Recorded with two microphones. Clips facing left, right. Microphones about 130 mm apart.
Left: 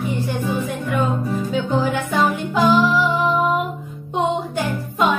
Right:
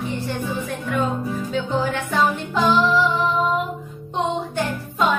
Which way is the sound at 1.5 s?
Centre (ahead or behind).